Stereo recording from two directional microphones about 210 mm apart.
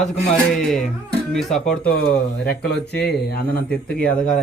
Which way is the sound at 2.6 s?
50° left (ahead or behind).